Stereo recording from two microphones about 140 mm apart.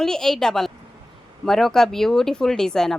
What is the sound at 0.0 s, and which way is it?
A woman's voice, 5° left (ahead or behind).